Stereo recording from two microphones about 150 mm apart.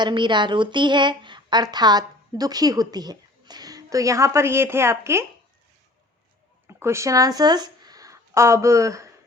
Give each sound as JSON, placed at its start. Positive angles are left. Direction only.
{"t": 0.0, "sound": "a woman's voice", "side_deg": -30}
{"t": 6.7, "sound": "speech", "side_deg": -15}